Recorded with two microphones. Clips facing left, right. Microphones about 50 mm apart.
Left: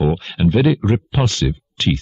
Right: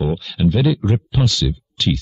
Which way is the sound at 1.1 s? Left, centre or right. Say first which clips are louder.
Left 1 dB; left.